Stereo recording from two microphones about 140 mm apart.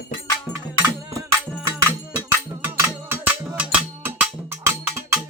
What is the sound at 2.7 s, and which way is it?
Music, 10° right (ahead or behind).